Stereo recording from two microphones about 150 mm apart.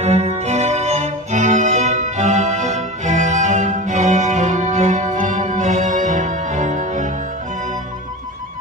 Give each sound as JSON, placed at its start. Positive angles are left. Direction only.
{"t": 0.0, "sound": "music", "side_deg": -45}